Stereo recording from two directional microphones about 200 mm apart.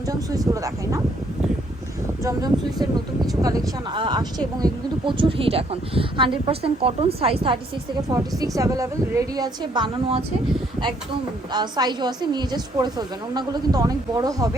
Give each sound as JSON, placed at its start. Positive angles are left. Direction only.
{"t": 0.1, "sound": "speech", "side_deg": -20}
{"t": 2.2, "sound": "speech", "side_deg": -20}
{"t": 11.5, "sound": "speech", "side_deg": -20}